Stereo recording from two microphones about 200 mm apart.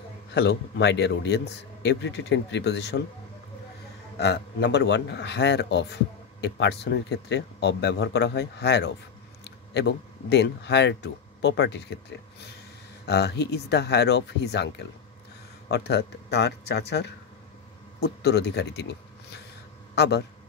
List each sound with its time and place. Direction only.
0.3 s a man's voice: 55° left (ahead or behind)
4.2 s a man's voice: 60° left (ahead or behind)
13.0 s a man's voice: 55° left (ahead or behind)